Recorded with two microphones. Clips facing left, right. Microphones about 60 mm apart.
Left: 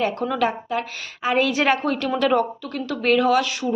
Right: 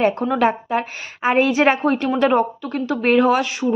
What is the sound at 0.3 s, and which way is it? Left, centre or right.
Speech, right.